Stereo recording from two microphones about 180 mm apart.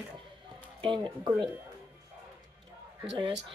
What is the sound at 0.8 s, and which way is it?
Speech, 25° right (ahead or behind).